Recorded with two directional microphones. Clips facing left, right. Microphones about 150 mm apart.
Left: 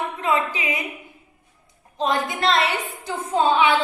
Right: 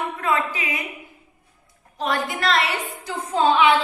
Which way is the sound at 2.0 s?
20° left (ahead or behind).